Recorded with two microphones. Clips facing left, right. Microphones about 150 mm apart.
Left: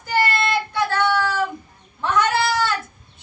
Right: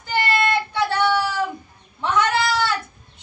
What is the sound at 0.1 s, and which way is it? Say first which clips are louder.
Child singing: even; 15° right (ahead or behind).